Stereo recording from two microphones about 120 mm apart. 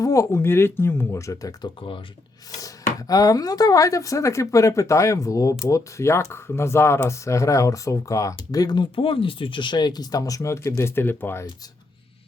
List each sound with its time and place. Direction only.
0.0 s speech: 25° left (ahead or behind)